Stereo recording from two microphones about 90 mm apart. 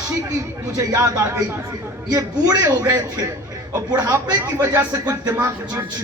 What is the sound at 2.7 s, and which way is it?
Speech, 40° right (ahead or behind).